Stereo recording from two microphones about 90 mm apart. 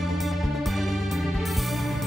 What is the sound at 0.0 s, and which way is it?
Music, centre (ahead or behind).